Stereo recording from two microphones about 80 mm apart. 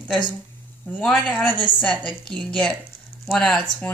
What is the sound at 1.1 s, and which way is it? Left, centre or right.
Speech, centre.